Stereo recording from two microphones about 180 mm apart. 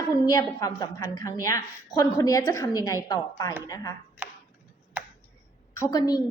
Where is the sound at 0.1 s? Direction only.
20° left (ahead or behind).